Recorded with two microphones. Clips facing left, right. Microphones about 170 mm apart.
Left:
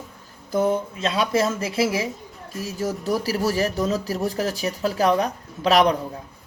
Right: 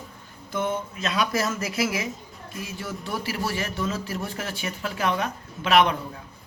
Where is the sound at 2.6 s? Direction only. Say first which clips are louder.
Left 7 dB; 40° left (ahead or behind).